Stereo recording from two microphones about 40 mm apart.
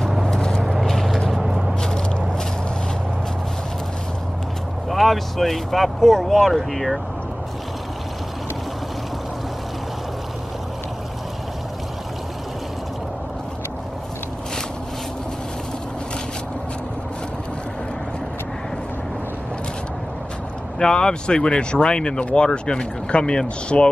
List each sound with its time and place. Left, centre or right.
0.2 s vehicle: centre
0.8 s vehicle: centre
1.8 s biting: centre
4.8 s speech: centre
20.8 s speech: centre